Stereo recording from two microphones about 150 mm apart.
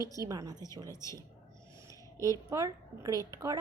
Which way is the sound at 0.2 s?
25° right (ahead or behind).